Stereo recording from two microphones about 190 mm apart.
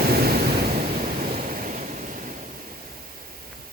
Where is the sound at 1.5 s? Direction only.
45° right (ahead or behind).